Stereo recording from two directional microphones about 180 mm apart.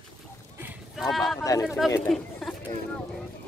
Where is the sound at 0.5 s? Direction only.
5° right (ahead or behind).